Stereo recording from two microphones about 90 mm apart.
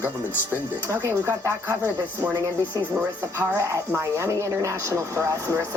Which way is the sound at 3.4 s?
20° right (ahead or behind).